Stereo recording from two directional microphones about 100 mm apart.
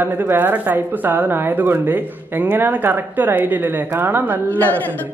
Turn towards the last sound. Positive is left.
turn(degrees=15)  # may be behind; listen again after turning